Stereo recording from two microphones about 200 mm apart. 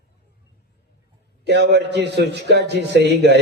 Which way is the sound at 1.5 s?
55° right (ahead or behind).